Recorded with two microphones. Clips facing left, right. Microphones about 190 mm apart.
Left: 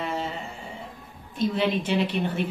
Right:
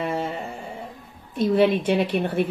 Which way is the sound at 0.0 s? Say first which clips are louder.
Right 4 dB; 50° right (ahead or behind).